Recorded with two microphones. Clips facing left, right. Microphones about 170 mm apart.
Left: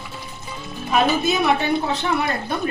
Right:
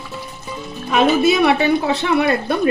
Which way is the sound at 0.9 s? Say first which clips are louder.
Right 5 dB; 70° right (ahead or behind).